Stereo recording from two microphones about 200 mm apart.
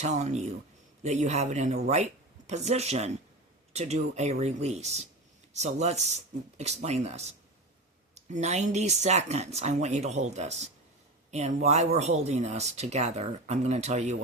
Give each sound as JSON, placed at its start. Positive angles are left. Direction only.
{"t": 0.0, "sound": "speech", "side_deg": -35}